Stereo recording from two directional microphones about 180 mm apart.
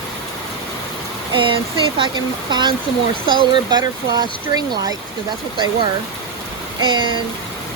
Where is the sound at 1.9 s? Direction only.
25° right (ahead or behind).